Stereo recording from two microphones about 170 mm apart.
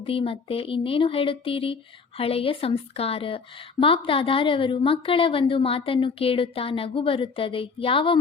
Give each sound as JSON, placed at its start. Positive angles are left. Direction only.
{"t": 0.0, "sound": "speech", "side_deg": 30}